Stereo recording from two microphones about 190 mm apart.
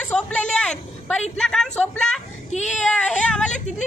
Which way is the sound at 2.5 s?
40° left (ahead or behind).